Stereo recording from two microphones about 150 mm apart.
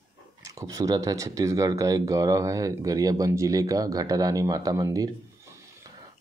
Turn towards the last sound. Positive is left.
turn(degrees=-25)  # may be behind; listen again after turning